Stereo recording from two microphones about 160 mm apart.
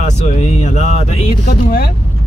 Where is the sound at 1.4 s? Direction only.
70° left (ahead or behind).